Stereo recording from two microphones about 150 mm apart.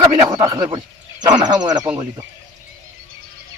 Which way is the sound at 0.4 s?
30° right (ahead or behind).